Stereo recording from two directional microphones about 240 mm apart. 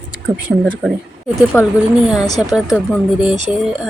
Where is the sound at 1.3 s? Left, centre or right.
Centre.